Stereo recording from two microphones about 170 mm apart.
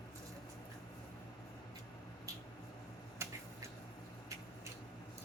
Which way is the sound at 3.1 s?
15° right (ahead or behind).